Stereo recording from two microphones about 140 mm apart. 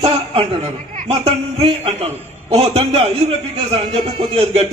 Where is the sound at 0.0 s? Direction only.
45° right (ahead or behind).